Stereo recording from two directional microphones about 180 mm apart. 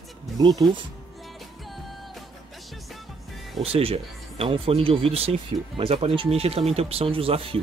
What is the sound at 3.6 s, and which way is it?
Speech, 30° right (ahead or behind).